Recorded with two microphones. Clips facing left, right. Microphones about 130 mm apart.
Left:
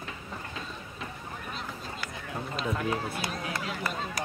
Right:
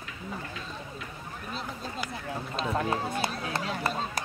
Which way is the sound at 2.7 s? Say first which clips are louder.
Right 3 dB; 30° right (ahead or behind).